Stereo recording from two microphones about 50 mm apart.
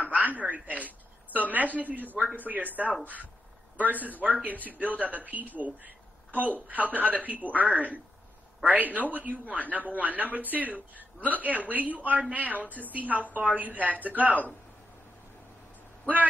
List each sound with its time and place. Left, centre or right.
0.0 s a sound: right
2.4 s speech: right
6.7 s speech: right